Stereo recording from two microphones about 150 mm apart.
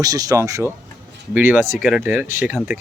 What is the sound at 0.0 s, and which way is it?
Speech, 25° right (ahead or behind).